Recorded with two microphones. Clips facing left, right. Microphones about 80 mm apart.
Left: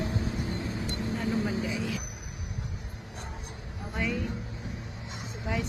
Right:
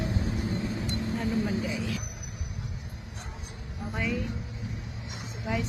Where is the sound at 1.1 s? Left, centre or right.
Centre.